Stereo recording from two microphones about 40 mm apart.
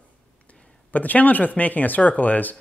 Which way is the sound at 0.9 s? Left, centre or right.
Left.